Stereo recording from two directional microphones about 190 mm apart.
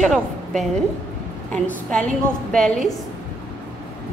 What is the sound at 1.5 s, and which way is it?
A woman's voice, 5° left (ahead or behind).